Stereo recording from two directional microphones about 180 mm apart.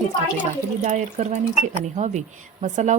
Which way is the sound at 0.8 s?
40° right (ahead or behind).